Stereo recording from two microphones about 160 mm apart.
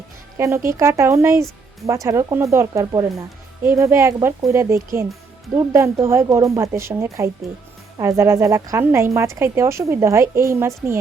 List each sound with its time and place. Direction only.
0.3 s a woman's voice: 15° right (ahead or behind)